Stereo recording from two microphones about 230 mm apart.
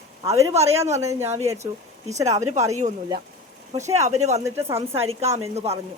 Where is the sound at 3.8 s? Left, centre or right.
Right.